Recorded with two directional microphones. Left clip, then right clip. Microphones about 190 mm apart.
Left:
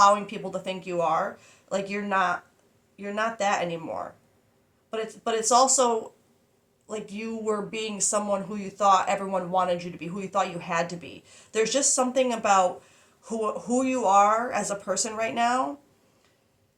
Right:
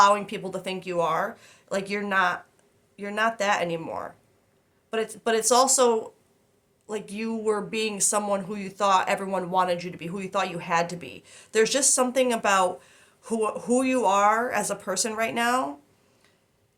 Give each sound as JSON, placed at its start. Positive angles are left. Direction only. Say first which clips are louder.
{"t": 0.0, "sound": "speech", "louder": "even", "side_deg": -50}